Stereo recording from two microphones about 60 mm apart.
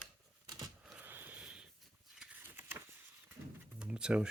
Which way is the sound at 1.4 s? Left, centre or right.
Centre.